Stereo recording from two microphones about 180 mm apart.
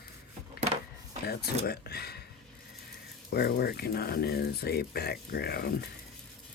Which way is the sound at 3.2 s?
60° left (ahead or behind).